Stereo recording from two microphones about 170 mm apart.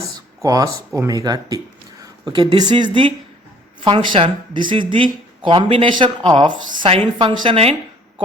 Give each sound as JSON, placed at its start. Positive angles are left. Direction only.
{"t": 0.4, "sound": "speech", "side_deg": -20}